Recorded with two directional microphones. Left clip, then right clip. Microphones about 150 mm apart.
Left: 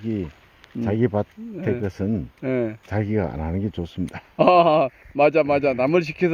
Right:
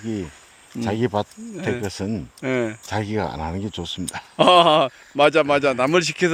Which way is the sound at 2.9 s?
35° left (ahead or behind).